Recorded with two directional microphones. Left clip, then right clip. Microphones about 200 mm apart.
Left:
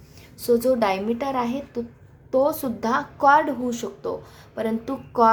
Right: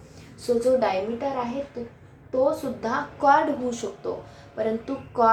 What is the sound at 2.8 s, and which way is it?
A woman's voice, 40° left (ahead or behind).